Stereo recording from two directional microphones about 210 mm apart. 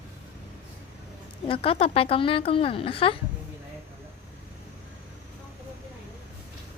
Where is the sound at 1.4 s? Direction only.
25° left (ahead or behind).